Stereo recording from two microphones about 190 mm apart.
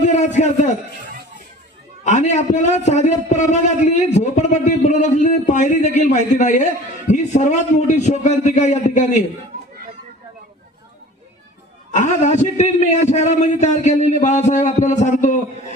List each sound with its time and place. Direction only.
2.0 s a man's voice: 35° left (ahead or behind)
11.9 s a man's voice: 40° left (ahead or behind)